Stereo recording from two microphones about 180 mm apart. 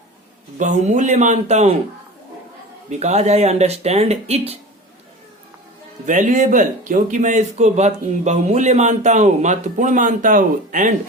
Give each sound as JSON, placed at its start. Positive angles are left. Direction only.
{"t": 0.6, "sound": "speech", "side_deg": -40}
{"t": 2.9, "sound": "speech", "side_deg": -40}
{"t": 6.1, "sound": "speech", "side_deg": -45}